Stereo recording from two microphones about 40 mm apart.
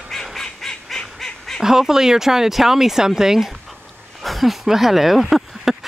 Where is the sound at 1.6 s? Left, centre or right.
Centre.